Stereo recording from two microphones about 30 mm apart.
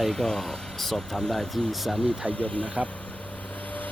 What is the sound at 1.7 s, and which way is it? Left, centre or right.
Speech, centre.